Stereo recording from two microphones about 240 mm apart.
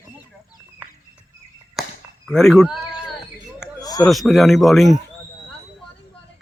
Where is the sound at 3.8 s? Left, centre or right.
Centre.